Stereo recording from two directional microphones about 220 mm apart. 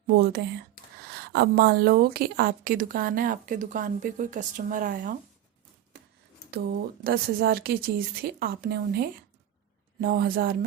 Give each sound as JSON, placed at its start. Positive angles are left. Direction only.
{"t": 0.1, "sound": "a woman's voice", "side_deg": -45}
{"t": 6.5, "sound": "a woman's voice", "side_deg": -45}